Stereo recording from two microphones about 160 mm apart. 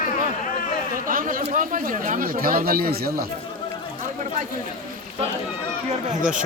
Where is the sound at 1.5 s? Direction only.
55° right (ahead or behind); by 3.2 s 75° right (ahead or behind).